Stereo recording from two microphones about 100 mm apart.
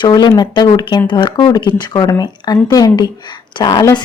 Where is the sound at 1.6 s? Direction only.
50° left (ahead or behind).